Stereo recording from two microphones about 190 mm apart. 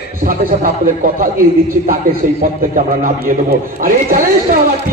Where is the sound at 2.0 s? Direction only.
50° right (ahead or behind).